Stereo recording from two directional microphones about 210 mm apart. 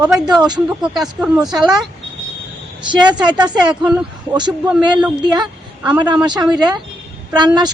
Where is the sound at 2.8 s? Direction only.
20° right (ahead or behind).